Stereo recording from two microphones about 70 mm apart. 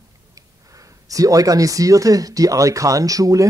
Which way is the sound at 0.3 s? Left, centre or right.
Right.